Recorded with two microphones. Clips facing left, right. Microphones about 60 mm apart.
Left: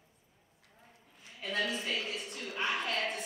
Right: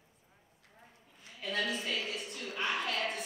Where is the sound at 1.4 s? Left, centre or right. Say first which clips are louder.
Even; centre.